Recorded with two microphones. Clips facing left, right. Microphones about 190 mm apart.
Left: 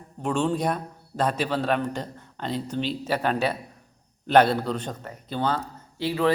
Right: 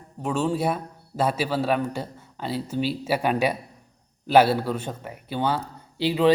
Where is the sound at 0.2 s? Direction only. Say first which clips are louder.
Even; 5° right (ahead or behind).